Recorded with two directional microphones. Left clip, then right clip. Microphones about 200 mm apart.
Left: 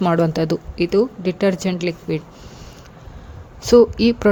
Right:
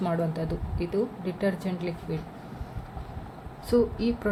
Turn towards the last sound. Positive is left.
turn(degrees=55)  # may be behind; listen again after turning